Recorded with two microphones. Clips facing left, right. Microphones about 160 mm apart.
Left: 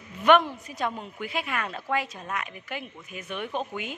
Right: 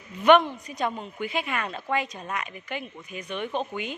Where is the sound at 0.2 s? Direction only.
Centre (ahead or behind).